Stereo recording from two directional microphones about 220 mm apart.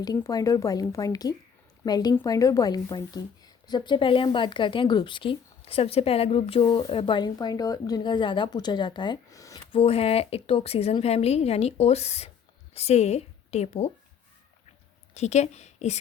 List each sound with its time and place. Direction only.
0.0 s a woman's voice: 15° left (ahead or behind)
9.8 s a woman's voice: 25° left (ahead or behind)
15.1 s a woman's voice: 30° left (ahead or behind)